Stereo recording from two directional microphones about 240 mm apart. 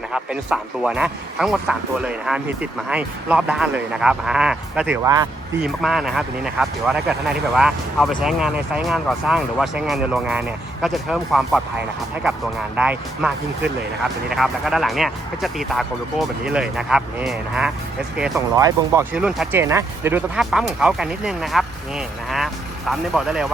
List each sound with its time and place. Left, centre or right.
0.1 s speech: centre
5.0 s speech: centre
5.6 s speech: centre
12.7 s speech: centre
14.3 s speech: centre
18.2 s speech: centre